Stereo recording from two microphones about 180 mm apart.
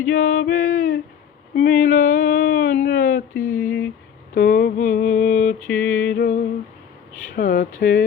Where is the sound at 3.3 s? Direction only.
10° left (ahead or behind).